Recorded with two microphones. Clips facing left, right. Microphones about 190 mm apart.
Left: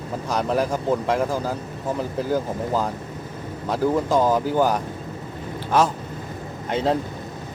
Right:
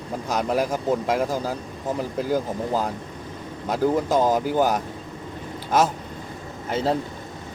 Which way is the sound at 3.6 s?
15° right (ahead or behind).